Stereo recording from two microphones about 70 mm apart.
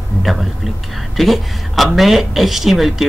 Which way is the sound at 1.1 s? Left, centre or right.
Centre.